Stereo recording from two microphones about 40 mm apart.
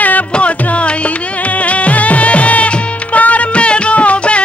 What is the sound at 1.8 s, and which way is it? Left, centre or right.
Music, left.